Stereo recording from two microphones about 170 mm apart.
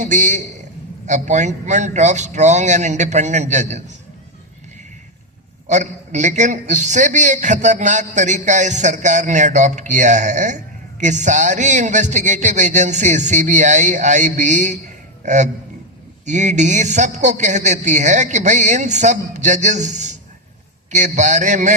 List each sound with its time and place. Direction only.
0.0 s a man's voice: 45° right (ahead or behind)
5.6 s a man's voice: 45° right (ahead or behind)